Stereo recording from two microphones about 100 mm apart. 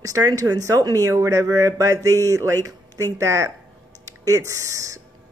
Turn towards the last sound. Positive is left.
turn(degrees=-35)  # may be behind; listen again after turning